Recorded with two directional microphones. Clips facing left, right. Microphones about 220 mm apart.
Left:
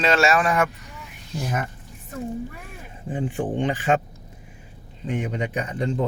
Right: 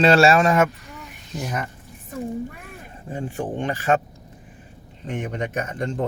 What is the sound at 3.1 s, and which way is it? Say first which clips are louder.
Speech: left 2 dB; 15° left (ahead or behind).